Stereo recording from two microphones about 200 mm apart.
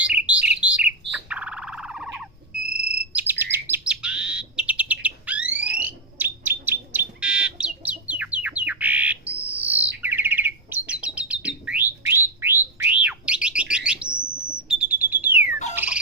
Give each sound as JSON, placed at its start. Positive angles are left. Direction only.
{"t": 0.0, "sound": "bird", "side_deg": -5}
{"t": 1.1, "sound": "music", "side_deg": -5}
{"t": 3.0, "sound": "bird", "side_deg": -5}
{"t": 5.7, "sound": "fire alarm", "side_deg": -10}
{"t": 10.0, "sound": "bird", "side_deg": -10}
{"t": 14.7, "sound": "smoke detector", "side_deg": -5}
{"t": 15.4, "sound": "bird", "side_deg": 40}
{"t": 15.7, "sound": "bird", "side_deg": -10}